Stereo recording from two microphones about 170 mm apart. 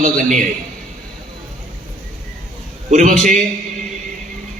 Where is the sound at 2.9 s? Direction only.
45° right (ahead or behind).